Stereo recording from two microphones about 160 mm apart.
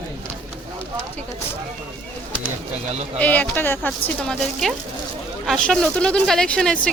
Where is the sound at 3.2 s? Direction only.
10° left (ahead or behind).